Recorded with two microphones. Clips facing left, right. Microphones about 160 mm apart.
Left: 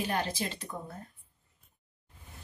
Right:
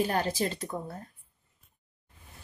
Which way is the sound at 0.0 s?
40° right (ahead or behind).